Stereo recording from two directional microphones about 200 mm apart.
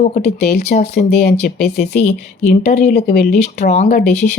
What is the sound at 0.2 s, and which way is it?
Speech, 50° left (ahead or behind).